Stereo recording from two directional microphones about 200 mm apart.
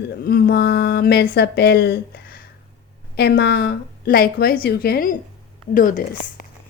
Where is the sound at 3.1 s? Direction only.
55° left (ahead or behind).